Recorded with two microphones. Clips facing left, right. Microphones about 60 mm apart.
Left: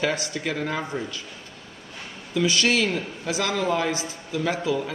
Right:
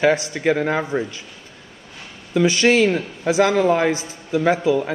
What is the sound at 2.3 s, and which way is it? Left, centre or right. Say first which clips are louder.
A man's voice: right 6 dB; right.